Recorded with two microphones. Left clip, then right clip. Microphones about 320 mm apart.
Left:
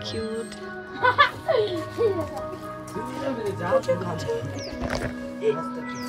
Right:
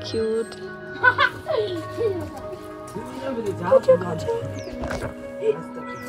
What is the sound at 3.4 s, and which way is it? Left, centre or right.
Speech, centre.